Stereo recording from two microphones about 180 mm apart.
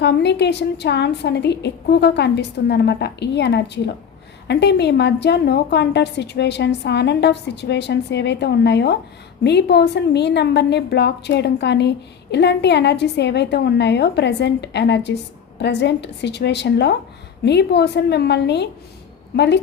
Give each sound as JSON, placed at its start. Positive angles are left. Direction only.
{"t": 0.0, "sound": "a woman's voice", "side_deg": 70}